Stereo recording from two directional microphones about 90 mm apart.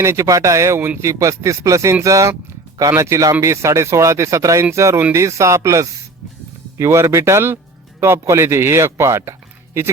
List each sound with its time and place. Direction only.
0.0 s speech: 30° right (ahead or behind)